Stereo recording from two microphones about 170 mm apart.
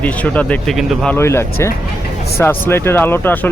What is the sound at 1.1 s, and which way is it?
Speech, 15° left (ahead or behind).